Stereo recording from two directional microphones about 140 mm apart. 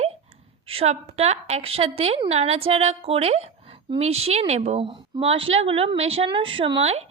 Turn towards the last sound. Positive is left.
turn(degrees=-45)  # may be behind; listen again after turning